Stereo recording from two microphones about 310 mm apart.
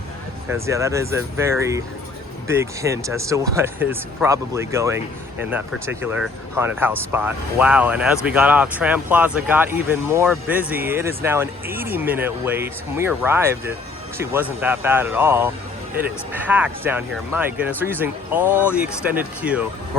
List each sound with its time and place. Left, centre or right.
0.6 s speech: centre